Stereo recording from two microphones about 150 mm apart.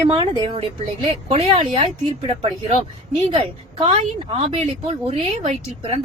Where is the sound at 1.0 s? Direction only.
45° right (ahead or behind).